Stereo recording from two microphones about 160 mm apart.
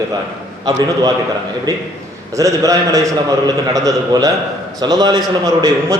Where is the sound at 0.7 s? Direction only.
25° right (ahead or behind).